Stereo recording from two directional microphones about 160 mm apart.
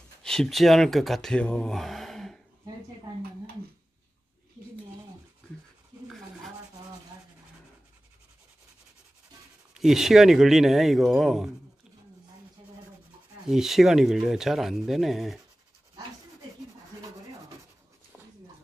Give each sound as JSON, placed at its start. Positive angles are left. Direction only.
{"t": 0.2, "sound": "speech", "side_deg": 5}
{"t": 3.1, "sound": "a sound", "side_deg": -20}
{"t": 9.8, "sound": "speech", "side_deg": 0}
{"t": 13.5, "sound": "speech", "side_deg": 0}